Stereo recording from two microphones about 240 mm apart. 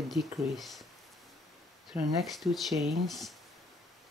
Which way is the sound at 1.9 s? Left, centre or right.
Centre.